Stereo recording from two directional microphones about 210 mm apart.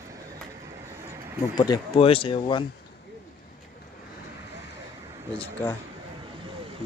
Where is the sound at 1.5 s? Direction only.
20° left (ahead or behind).